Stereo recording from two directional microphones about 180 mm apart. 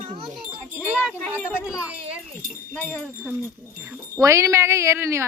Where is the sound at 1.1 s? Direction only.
5° left (ahead or behind).